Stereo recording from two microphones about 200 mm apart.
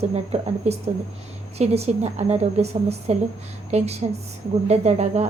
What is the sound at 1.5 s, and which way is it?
A woman's voice, 30° right (ahead or behind).